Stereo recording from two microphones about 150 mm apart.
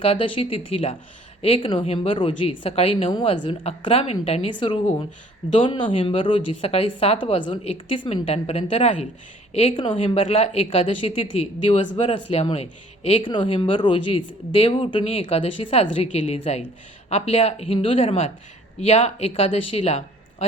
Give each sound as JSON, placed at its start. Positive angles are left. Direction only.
{"t": 0.0, "sound": "speech", "side_deg": 40}
{"t": 3.1, "sound": "speech", "side_deg": 30}